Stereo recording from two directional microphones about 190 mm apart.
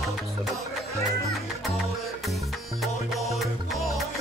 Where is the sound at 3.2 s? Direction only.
Centre (ahead or behind).